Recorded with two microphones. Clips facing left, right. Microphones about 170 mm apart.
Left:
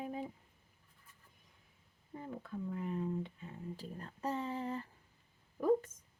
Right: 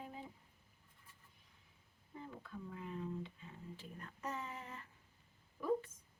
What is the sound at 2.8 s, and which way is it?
Speech, 50° left (ahead or behind).